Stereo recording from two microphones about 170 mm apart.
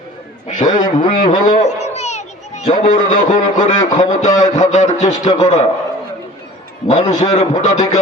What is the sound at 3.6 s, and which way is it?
A man's voice, 45° left (ahead or behind).